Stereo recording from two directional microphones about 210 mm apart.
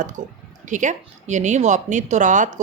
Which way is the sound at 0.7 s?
35° right (ahead or behind).